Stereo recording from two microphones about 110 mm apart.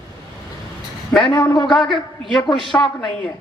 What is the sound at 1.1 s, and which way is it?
A man's voice, 10° left (ahead or behind).